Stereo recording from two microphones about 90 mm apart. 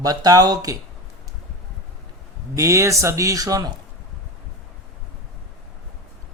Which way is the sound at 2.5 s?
35° right (ahead or behind).